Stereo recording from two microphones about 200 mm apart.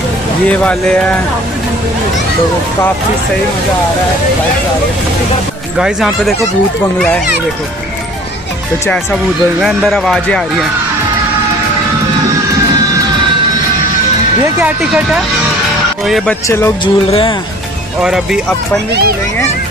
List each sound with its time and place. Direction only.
0.5 s speech: 5° left (ahead or behind)
5.8 s speech: 5° right (ahead or behind)
8.8 s speech: 5° left (ahead or behind)
16.4 s speech: 15° left (ahead or behind)
16.8 s speech: 25° left (ahead or behind)
18.0 s speech: 5° right (ahead or behind)